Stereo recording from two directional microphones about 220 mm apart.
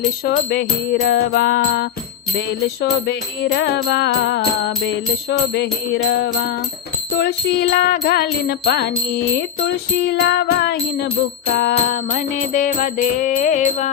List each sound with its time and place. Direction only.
0.3 s music: 45° left (ahead or behind)
3.1 s music: 50° left (ahead or behind); by 13.9 s 35° left (ahead or behind)